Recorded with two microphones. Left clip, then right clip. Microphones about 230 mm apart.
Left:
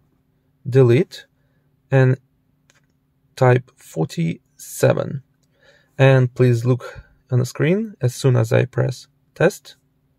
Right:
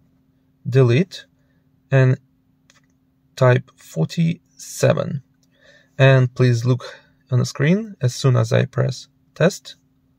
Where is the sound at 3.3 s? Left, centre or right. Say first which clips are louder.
Even; centre.